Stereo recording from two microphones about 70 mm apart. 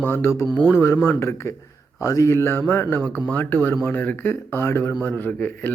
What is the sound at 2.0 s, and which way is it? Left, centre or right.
Speech, left.